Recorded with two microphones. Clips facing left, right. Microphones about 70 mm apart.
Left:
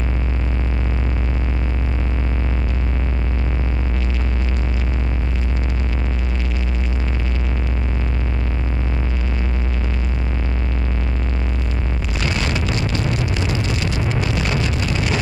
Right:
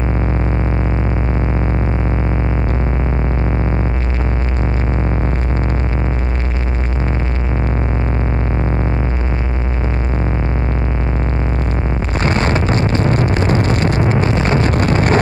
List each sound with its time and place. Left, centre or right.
12.2 s vehicle: right